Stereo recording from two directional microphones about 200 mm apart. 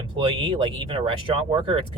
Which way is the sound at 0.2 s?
25° right (ahead or behind).